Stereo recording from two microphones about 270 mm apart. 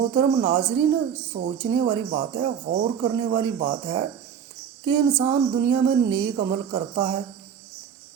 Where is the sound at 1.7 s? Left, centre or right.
Centre.